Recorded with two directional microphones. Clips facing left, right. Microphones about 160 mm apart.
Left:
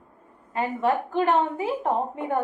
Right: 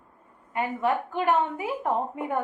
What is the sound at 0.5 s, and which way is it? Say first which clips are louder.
A woman's voice: left 2 dB; 30° left (ahead or behind).